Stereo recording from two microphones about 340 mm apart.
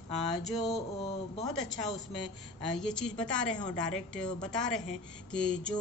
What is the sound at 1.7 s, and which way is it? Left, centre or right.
Speech, right.